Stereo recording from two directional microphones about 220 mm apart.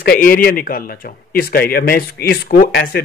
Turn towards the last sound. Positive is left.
turn(degrees=40)  # may be behind; listen again after turning